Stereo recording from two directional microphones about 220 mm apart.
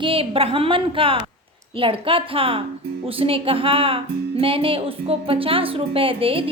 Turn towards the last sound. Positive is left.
turn(degrees=-25)  # may be behind; listen again after turning